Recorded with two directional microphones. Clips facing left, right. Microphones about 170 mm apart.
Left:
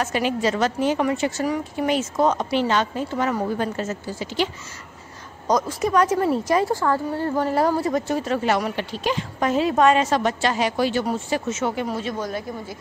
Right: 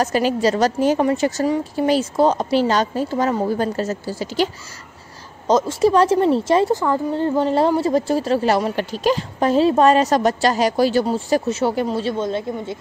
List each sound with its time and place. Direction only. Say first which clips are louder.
0.0 s a woman's voice: right 4 dB; 35° right (ahead or behind)
5.5 s a woman's voice: right 5 dB; 25° right (ahead or behind)